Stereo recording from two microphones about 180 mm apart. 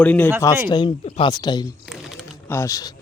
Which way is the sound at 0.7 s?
25° left (ahead or behind).